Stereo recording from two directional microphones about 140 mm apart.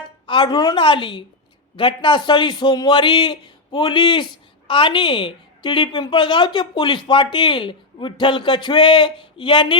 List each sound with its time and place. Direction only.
0.3 s a woman's voice: 35° left (ahead or behind)